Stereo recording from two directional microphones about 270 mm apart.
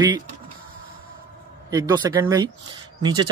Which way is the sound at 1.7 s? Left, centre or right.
Centre.